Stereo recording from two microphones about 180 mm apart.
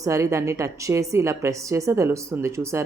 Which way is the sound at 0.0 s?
15° right (ahead or behind).